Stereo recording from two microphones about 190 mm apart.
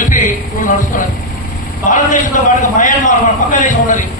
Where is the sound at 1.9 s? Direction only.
40° left (ahead or behind).